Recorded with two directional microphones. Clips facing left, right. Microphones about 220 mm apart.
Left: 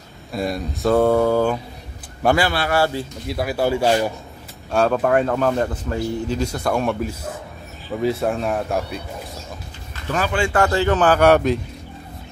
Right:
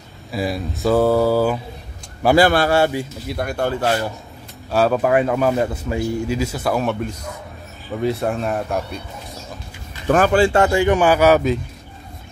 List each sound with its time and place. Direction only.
0.3 s speech: centre (ahead or behind)
2.3 s speech: 45° right (ahead or behind)
2.7 s speech: 20° right (ahead or behind)
3.3 s speech: 5° left (ahead or behind)
4.6 s speech: 5° right (ahead or behind)
10.0 s speech: 50° right (ahead or behind)
10.4 s speech: 25° right (ahead or behind)
10.7 s speech: 15° right (ahead or behind)